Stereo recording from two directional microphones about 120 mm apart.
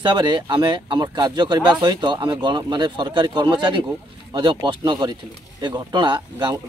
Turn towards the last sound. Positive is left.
turn(degrees=-40)  # may be behind; listen again after turning